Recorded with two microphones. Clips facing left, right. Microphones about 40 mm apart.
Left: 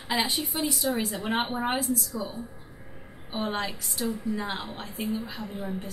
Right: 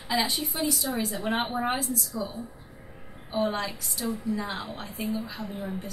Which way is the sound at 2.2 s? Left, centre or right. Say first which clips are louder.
Right 1 dB; left.